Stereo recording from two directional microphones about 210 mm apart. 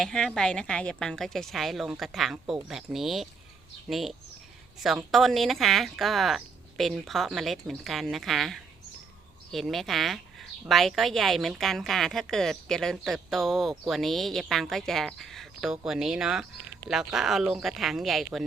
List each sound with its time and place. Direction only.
0.0 s speech: centre (ahead or behind)